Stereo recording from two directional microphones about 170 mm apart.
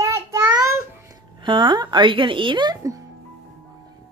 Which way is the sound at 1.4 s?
25° right (ahead or behind).